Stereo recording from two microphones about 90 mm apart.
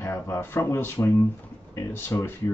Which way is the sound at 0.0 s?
30° left (ahead or behind).